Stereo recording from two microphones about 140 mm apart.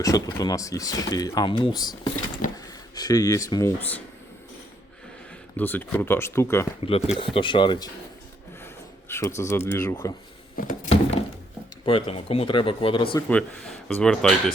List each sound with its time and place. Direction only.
0.0 s speech: 25° left (ahead or behind)
5.5 s speech: 15° left (ahead or behind)
6.8 s speech: 45° left (ahead or behind)
8.6 s speech: 15° left (ahead or behind)
10.7 s a sound: 50° left (ahead or behind)
11.9 s speech: 40° left (ahead or behind)
13.8 s speech: 5° left (ahead or behind)